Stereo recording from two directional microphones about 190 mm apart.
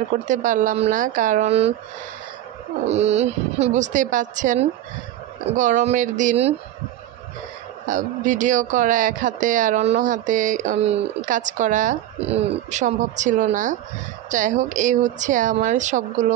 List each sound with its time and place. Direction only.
0.3 s speech: 40° right (ahead or behind)
2.9 s speech: 35° right (ahead or behind)
7.8 s speech: 40° right (ahead or behind)